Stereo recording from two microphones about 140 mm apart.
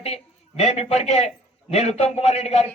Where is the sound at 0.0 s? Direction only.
50° left (ahead or behind).